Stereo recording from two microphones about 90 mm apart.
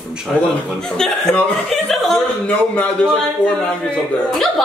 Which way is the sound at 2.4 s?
15° left (ahead or behind).